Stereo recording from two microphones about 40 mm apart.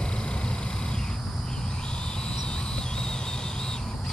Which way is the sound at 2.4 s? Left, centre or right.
Centre.